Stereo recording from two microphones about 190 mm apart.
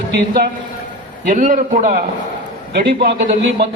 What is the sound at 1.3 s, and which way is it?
Speech, 45° right (ahead or behind).